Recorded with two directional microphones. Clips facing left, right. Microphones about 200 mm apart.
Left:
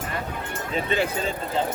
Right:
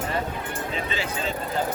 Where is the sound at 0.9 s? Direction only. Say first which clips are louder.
Left 6 dB; 55° left (ahead or behind).